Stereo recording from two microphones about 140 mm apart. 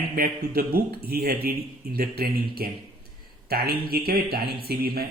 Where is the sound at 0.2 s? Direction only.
90° right.